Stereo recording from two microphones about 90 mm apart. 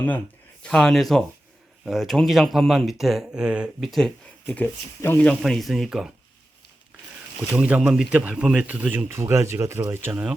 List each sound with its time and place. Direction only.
0.6 s speech: 10° left (ahead or behind); by 3.7 s 10° right (ahead or behind)
3.8 s speech: centre (ahead or behind)
4.4 s speech: 20° left (ahead or behind)
5.3 s speech: centre (ahead or behind)
7.5 s speech: 10° right (ahead or behind)
9.0 s speech: 30° right (ahead or behind)
10.1 s speech: 15° right (ahead or behind)